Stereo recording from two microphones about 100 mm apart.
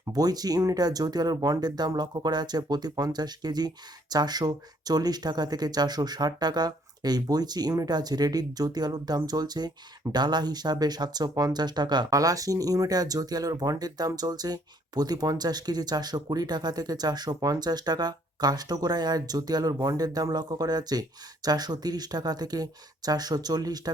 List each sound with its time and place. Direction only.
0.1 s speech: 40° right (ahead or behind)